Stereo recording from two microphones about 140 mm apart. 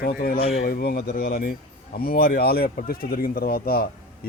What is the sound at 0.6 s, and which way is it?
Speech, 90° left.